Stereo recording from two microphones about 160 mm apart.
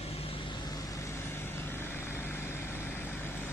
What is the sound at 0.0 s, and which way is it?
Vehicle, 35° left (ahead or behind).